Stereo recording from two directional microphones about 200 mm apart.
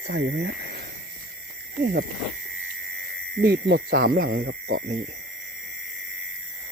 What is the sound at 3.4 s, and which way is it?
Speech, 55° right (ahead or behind).